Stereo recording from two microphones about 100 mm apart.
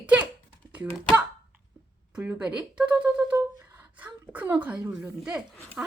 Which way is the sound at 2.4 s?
10° right (ahead or behind).